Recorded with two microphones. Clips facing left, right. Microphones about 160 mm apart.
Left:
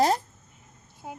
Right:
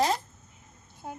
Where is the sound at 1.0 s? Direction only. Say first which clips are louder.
Even; 5° left (ahead or behind).